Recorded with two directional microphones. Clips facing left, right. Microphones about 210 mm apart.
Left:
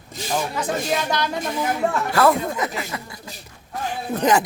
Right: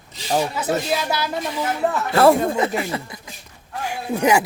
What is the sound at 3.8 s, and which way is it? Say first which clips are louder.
Speech: right 1 dB; 10° right (ahead or behind).